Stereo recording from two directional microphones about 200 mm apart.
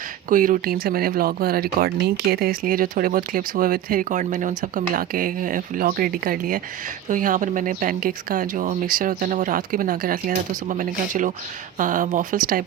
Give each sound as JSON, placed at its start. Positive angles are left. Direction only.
{"t": 0.3, "sound": "speech", "side_deg": -45}